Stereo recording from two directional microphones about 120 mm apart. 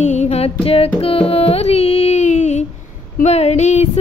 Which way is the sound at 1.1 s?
55° left (ahead or behind).